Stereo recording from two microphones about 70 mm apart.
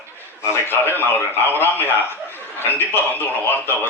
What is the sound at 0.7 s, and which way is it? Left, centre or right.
A man's voice, left.